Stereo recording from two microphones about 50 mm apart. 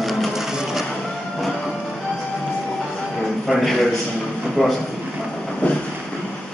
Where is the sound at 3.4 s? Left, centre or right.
Centre.